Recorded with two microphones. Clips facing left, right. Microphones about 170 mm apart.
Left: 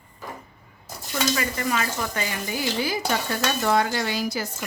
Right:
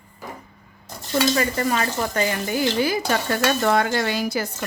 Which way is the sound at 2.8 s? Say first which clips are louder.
Right 4 dB; 55° right (ahead or behind).